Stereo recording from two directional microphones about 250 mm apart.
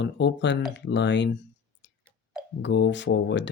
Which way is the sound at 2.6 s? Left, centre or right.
Left.